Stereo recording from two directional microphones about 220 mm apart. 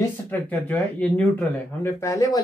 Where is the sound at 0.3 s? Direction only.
10° left (ahead or behind).